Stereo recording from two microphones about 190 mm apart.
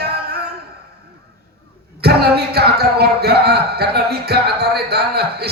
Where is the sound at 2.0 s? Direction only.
55° right (ahead or behind).